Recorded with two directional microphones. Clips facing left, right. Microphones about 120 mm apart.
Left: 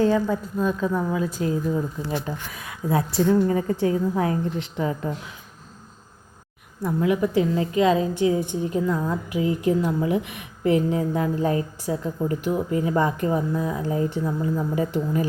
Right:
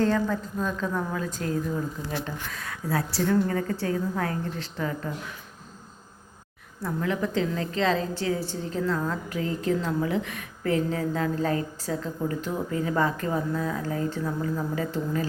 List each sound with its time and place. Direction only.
0.0 s a woman's voice: 10° left (ahead or behind)
6.8 s a woman's voice: 15° left (ahead or behind)